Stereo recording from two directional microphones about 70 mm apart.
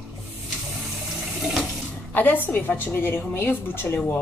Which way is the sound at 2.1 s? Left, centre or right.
Left.